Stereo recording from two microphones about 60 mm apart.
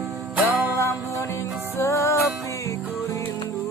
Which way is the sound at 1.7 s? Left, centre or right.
Left.